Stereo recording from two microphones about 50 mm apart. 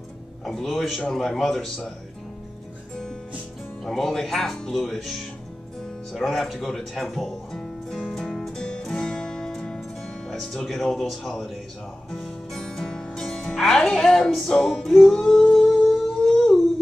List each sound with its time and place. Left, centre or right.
0.5 s speech: centre
3.8 s speech: centre
6.1 s speech: centre
8.2 s music: centre
13.2 s speech: centre
14.5 s music: centre
16.3 s a sound: centre